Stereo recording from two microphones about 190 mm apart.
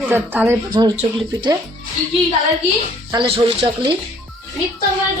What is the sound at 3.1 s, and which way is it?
Speech, 25° right (ahead or behind).